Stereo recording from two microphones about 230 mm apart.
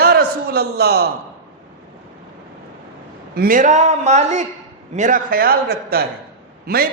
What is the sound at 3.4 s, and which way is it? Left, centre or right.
A man's voice, right.